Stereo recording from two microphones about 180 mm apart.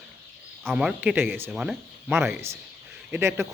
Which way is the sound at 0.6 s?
Centre (ahead or behind).